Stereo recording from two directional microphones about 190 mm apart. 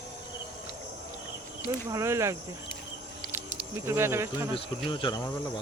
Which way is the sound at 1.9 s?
15° right (ahead or behind).